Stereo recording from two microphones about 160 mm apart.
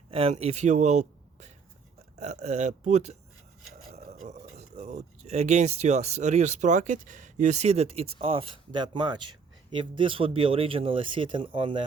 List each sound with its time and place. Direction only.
0.1 s speech: 35° right (ahead or behind)
4.1 s a sound: 45° right (ahead or behind)
4.5 s speech: 45° right (ahead or behind)